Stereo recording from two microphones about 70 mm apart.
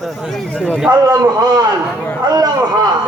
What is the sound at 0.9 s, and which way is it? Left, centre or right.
A man's voice, right.